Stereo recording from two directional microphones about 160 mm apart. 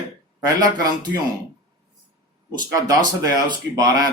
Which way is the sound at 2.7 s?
20° right (ahead or behind).